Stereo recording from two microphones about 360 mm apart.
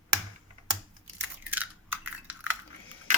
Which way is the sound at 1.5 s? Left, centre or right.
Centre.